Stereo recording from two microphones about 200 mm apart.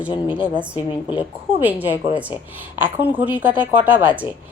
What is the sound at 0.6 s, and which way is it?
A woman's voice, 5° right (ahead or behind).